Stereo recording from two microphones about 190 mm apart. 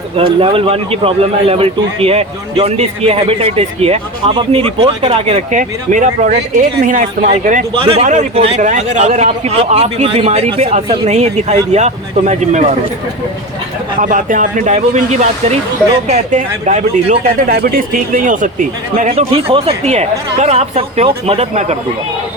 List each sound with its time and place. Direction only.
0.2 s a man's voice: 30° right (ahead or behind)
7.8 s a man's voice: 25° right (ahead or behind)
14.0 s a man's voice: 45° right (ahead or behind)
17.5 s a man's voice: 55° right (ahead or behind); by 21.8 s 35° right (ahead or behind)